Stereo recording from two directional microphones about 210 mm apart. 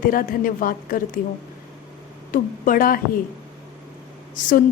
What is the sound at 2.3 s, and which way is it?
Speech, 40° left (ahead or behind).